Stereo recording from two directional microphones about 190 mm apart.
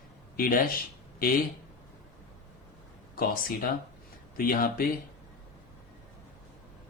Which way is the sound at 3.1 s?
50° left (ahead or behind).